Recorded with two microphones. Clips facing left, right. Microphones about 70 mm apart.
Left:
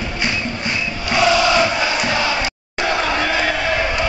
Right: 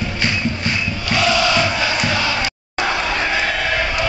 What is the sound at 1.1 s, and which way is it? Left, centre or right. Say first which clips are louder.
Chant: left 2 dB; centre.